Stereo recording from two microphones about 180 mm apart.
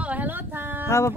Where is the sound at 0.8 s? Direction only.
15° left (ahead or behind).